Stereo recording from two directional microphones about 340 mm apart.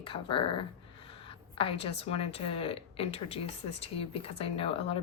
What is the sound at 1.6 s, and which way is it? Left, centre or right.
A woman's voice, centre.